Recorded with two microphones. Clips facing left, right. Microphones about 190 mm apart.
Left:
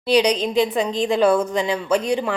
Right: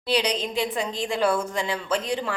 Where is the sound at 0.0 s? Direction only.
15° left (ahead or behind).